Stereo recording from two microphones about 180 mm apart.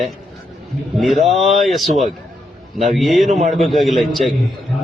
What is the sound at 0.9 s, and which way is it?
Speech, centre (ahead or behind).